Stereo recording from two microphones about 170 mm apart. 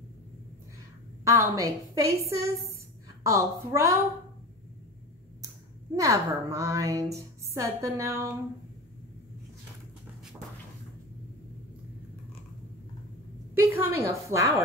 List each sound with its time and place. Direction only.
1.2 s a woman's voice: 15° right (ahead or behind)
5.9 s a woman's voice: 20° right (ahead or behind)
13.6 s a woman's voice: 15° right (ahead or behind)